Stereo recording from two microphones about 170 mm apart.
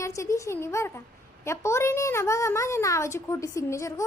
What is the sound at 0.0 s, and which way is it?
A woman's voice, 15° left (ahead or behind).